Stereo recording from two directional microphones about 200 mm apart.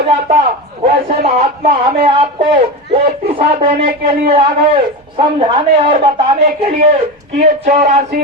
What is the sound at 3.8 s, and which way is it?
Speech, 30° right (ahead or behind).